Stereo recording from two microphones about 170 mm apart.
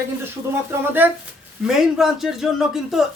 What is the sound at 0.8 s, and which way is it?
Speech, 10° right (ahead or behind).